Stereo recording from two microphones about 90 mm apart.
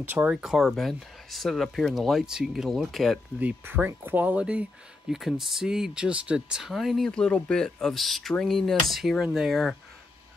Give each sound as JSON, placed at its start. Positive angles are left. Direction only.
{"t": 0.0, "sound": "speech", "side_deg": -20}
{"t": 0.4, "sound": "speech", "side_deg": 0}
{"t": 3.3, "sound": "speech", "side_deg": -20}
{"t": 5.1, "sound": "speech", "side_deg": -5}